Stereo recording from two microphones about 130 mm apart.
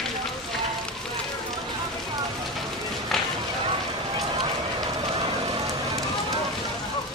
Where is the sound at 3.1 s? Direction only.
5° left (ahead or behind).